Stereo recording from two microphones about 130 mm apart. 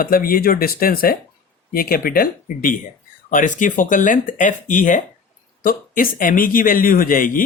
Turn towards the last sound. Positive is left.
turn(degrees=90)